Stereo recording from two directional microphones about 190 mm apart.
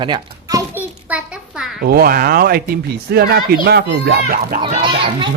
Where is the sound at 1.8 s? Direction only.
55° right (ahead or behind).